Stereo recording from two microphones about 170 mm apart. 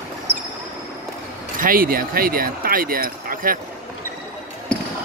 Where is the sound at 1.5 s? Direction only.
55° right (ahead or behind).